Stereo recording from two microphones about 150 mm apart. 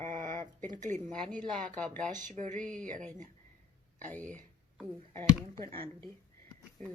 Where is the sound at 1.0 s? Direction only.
5° left (ahead or behind).